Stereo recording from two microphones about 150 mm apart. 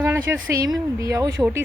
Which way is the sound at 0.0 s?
15° right (ahead or behind).